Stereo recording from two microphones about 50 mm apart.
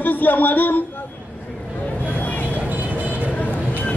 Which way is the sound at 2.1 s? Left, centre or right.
Left.